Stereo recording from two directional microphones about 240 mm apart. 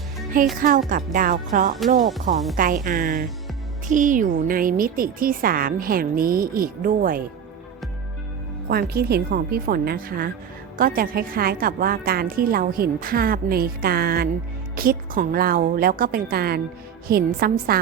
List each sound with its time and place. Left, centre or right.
0.3 s a woman's voice: right
8.7 s a woman's voice: right